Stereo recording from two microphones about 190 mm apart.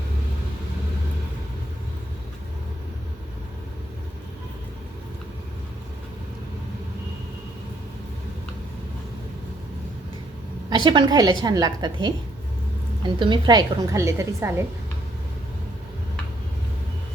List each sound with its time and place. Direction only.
10.7 s a woman's voice: 25° right (ahead or behind)